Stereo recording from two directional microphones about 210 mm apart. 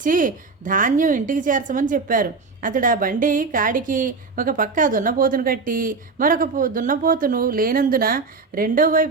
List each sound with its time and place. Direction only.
0.0 s a woman's voice: 40° right (ahead or behind)